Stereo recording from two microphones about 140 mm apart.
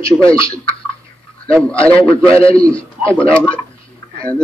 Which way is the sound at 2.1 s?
40° left (ahead or behind).